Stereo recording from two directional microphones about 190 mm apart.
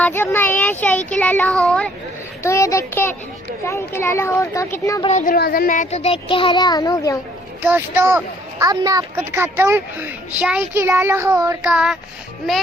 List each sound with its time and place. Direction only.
0.0 s speech: 10° left (ahead or behind)
2.4 s speech: 15° left (ahead or behind)
5.0 s speech: 40° left (ahead or behind); by 7.2 s 15° left (ahead or behind)
7.6 s speech: 10° right (ahead or behind)
11.6 s child singing: 5° right (ahead or behind)